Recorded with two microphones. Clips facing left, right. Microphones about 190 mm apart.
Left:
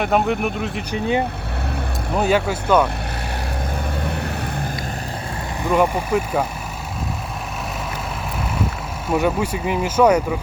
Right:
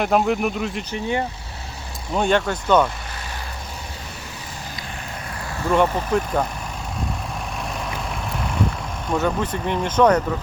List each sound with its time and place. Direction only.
0.0 s speech: centre (ahead or behind)
0.9 s speech: 15° left (ahead or behind)
2.1 s speech: 5° left (ahead or behind)
4.0 s vehicle: 60° left (ahead or behind)
5.6 s speech: 10° left (ahead or behind)
9.0 s speech: 10° left (ahead or behind)